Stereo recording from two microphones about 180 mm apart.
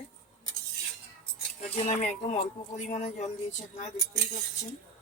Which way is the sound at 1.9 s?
40° left (ahead or behind).